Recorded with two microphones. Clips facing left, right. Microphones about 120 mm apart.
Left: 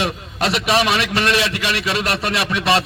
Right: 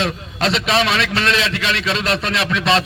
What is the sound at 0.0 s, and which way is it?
A man's voice, 10° left (ahead or behind).